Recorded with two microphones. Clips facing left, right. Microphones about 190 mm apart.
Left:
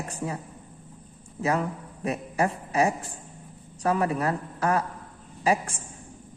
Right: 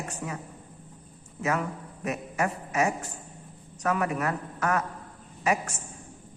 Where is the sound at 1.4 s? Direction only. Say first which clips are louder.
Left 2 dB; 30° left (ahead or behind).